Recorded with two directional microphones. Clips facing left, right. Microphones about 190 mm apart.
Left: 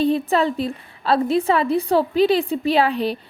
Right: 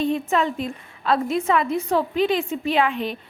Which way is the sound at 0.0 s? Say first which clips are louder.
Left 3 dB; 35° left (ahead or behind).